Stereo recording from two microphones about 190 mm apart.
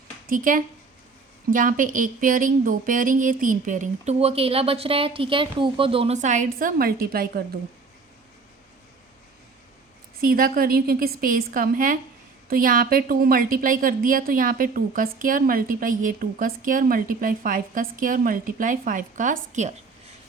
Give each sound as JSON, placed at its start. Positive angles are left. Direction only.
{"t": 0.3, "sound": "a woman's voice", "side_deg": -45}
{"t": 10.2, "sound": "a woman's voice", "side_deg": -50}